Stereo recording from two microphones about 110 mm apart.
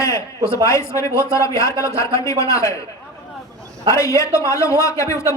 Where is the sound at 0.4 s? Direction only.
25° left (ahead or behind).